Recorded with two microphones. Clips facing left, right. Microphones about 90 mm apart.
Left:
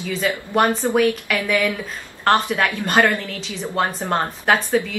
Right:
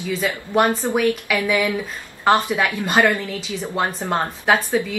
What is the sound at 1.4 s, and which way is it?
Speech, 15° right (ahead or behind).